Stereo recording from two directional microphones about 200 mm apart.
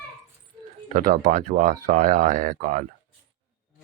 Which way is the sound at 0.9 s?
40° right (ahead or behind).